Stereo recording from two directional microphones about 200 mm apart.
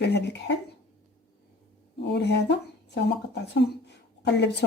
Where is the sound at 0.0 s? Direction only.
60° left (ahead or behind).